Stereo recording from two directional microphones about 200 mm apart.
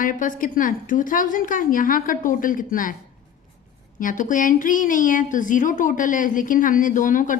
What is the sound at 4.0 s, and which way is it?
Speech, 40° left (ahead or behind).